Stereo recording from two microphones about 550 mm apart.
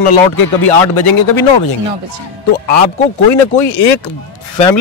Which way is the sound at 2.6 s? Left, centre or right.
Left.